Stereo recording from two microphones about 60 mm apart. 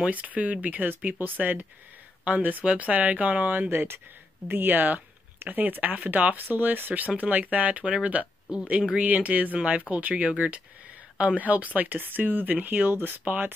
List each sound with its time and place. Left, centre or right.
0.1 s speech: right